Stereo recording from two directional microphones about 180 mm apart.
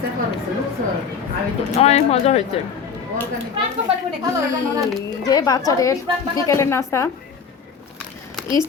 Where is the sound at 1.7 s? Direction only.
35° left (ahead or behind).